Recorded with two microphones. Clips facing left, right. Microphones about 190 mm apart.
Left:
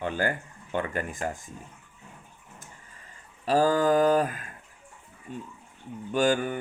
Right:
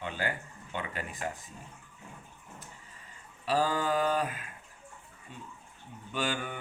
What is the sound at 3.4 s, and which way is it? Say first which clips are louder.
Speech: left 7 dB; 45° left (ahead or behind).